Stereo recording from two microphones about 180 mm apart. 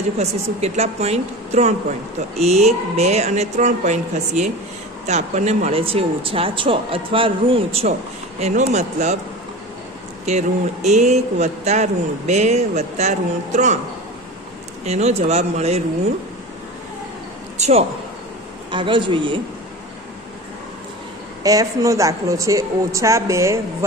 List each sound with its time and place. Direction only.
0.2 s speech: 35° right (ahead or behind)
10.2 s speech: 40° right (ahead or behind)
14.9 s speech: 35° right (ahead or behind)
17.6 s a man's voice: 40° right (ahead or behind)
18.7 s a man's voice: 25° right (ahead or behind)
21.4 s a woman's voice: 20° right (ahead or behind)